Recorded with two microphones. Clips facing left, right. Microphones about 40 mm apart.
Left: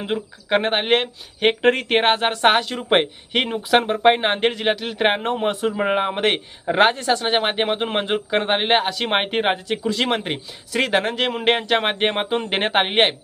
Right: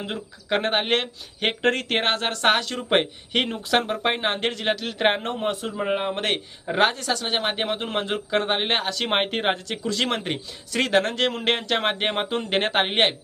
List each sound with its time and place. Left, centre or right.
0.0 s a man's voice: centre
5.5 s speech: left
6.1 s a man's voice: left